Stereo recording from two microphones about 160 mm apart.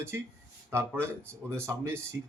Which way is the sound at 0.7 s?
15° right (ahead or behind).